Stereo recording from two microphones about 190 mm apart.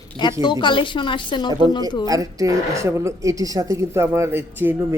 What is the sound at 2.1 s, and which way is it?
A woman's voice, 20° right (ahead or behind).